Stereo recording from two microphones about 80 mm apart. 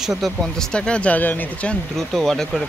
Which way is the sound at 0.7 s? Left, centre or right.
Centre.